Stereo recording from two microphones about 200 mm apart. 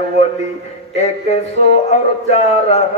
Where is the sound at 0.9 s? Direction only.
35° left (ahead or behind).